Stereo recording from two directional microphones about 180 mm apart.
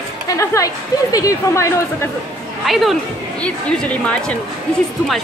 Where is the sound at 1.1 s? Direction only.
15° left (ahead or behind).